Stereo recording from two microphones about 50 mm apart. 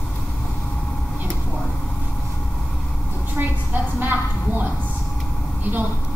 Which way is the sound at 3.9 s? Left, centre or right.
Right.